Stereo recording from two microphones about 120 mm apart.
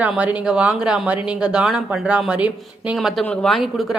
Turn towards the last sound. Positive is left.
turn(degrees=0)  # may be behind; listen again after turning